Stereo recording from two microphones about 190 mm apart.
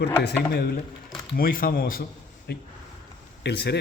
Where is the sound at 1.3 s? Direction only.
50° left (ahead or behind).